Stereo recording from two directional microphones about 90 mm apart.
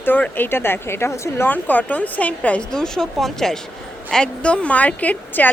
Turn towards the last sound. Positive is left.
turn(degrees=20)  # may be behind; listen again after turning